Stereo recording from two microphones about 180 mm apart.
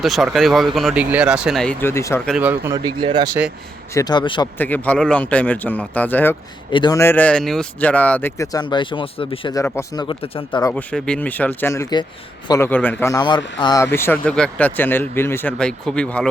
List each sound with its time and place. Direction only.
0.0 s speech: centre (ahead or behind)
1.8 s speech: 15° left (ahead or behind)
2.2 s speech: 5° right (ahead or behind)
2.7 s speech: 25° right (ahead or behind)
3.9 s speech: 25° left (ahead or behind)
4.5 s speech: 10° left (ahead or behind)
6.7 s speech: 25° left (ahead or behind)
9.6 s speech: 15° left (ahead or behind)
10.6 s speech: 15° left (ahead or behind)
10.9 s speech: 5° left (ahead or behind)